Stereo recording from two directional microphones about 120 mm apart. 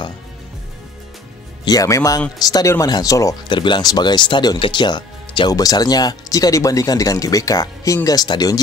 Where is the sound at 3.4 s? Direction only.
40° left (ahead or behind).